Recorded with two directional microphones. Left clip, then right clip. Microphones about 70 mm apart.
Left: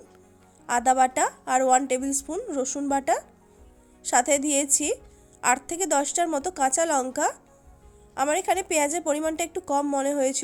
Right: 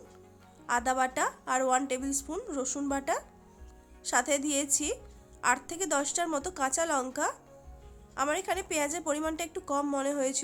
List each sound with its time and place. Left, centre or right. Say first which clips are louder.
0.7 s a woman's voice: left 7 dB; left
2.9 s a woman's voice: left 9 dB; left